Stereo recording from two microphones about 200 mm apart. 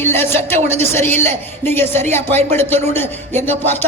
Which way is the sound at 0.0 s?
10° left (ahead or behind).